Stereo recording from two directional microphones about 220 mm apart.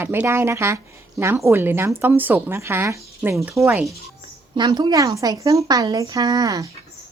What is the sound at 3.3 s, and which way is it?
Speech, centre (ahead or behind).